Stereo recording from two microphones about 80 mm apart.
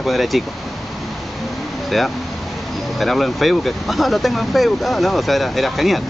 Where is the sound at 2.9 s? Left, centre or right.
Centre.